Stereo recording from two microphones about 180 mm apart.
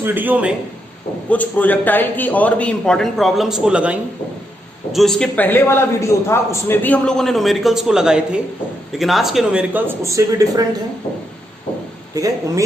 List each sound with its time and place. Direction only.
0.0 s speech: 10° right (ahead or behind)
1.3 s a man's voice: 10° left (ahead or behind); by 10.7 s 20° right (ahead or behind)
12.1 s speech: 20° right (ahead or behind)